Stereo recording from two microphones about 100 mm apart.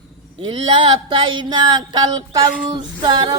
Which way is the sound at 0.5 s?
55° right (ahead or behind).